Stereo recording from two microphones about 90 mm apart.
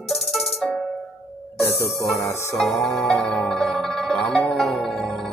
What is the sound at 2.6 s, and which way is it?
Music, 5° left (ahead or behind).